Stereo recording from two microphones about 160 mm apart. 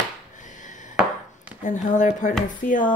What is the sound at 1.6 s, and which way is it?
Speech, 50° left (ahead or behind).